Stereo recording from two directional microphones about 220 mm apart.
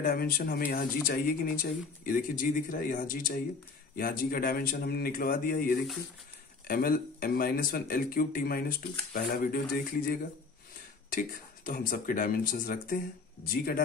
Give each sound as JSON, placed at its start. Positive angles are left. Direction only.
{"t": 0.0, "sound": "speech", "side_deg": 45}
{"t": 11.1, "sound": "speech", "side_deg": 40}